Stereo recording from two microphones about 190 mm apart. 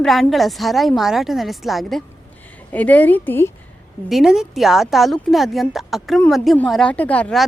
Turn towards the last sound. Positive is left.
turn(degrees=5)  # may be behind; listen again after turning